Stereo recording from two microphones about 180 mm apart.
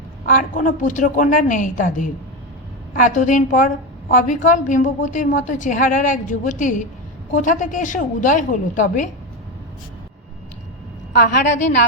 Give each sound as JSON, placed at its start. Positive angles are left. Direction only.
{"t": 0.3, "sound": "a woman's voice", "side_deg": 50}
{"t": 11.1, "sound": "a woman's voice", "side_deg": 55}